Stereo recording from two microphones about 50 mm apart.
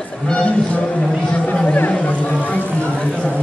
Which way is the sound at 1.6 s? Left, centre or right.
Left.